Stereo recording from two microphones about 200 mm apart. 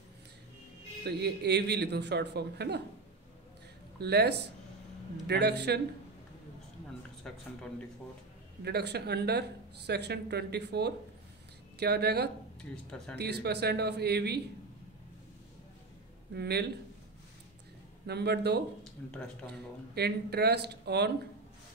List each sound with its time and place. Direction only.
1.0 s speech: 55° right (ahead or behind)
4.0 s speech: 55° right (ahead or behind)
7.2 s speech: 5° left (ahead or behind)
8.6 s speech: 55° right (ahead or behind)
16.3 s speech: 55° right (ahead or behind)
18.0 s speech: 55° right (ahead or behind)
19.0 s speech: 10° left (ahead or behind)
19.9 s speech: 55° right (ahead or behind)